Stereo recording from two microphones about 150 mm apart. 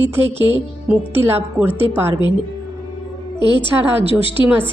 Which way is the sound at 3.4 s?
30° left (ahead or behind).